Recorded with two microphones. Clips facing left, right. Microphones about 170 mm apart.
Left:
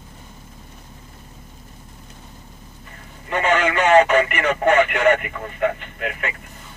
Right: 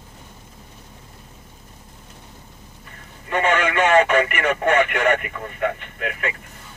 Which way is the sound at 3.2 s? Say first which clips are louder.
Left 1 dB; 30° left (ahead or behind).